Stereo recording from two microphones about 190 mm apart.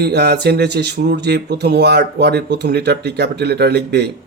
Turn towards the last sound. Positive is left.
turn(degrees=-60)  # may be behind; listen again after turning